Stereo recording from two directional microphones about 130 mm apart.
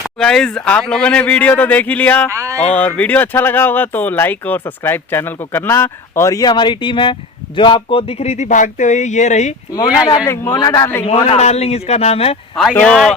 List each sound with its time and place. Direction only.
0.2 s speech: 5° left (ahead or behind)
2.3 s speech: 20° right (ahead or behind)
2.6 s speech: 10° left (ahead or behind); by 9.6 s 65° left (ahead or behind)
9.7 s speech: 25° left (ahead or behind)
10.6 s speech: 30° left (ahead or behind)
11.3 s speech: 55° left (ahead or behind)
12.8 s speech: 5° left (ahead or behind)